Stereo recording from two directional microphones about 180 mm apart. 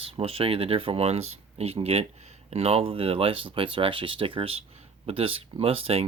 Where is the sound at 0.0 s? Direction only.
30° right (ahead or behind).